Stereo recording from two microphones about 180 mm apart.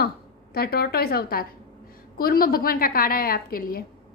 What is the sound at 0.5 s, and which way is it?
A woman's voice, 60° left (ahead or behind).